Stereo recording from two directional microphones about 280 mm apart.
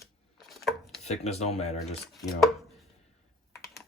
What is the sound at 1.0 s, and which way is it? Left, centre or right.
Speech, left.